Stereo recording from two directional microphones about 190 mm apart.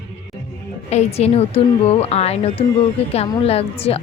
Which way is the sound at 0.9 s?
35° left (ahead or behind).